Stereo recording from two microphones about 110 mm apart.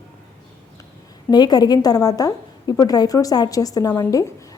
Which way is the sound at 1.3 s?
40° left (ahead or behind).